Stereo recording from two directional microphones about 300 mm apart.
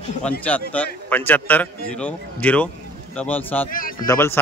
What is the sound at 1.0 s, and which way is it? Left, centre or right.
A man's voice, centre.